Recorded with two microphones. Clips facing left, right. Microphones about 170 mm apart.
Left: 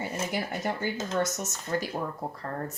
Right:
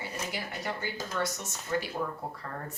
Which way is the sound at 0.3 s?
50° left (ahead or behind).